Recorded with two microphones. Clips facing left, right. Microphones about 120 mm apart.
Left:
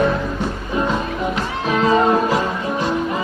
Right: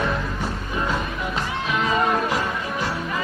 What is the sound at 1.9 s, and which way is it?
Music, 30° left (ahead or behind).